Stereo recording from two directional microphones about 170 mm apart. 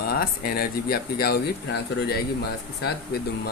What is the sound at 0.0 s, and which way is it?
Speech, 65° left (ahead or behind).